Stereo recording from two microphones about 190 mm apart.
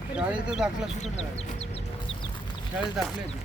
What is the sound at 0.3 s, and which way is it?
Speech, 5° right (ahead or behind).